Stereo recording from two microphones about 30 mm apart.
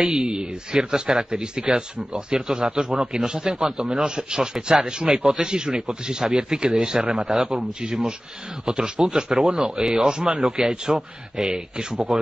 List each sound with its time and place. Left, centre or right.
0.0 s a man's voice: right
4.0 s speech: right
8.6 s speech: right
9.0 s speech: centre
9.5 s a man's voice: right